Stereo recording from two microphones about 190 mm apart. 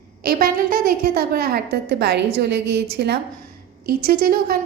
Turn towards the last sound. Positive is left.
turn(degrees=-50)  # may be behind; listen again after turning